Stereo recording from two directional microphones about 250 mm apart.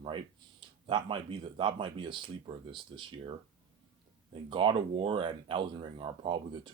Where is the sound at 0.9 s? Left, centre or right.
Centre.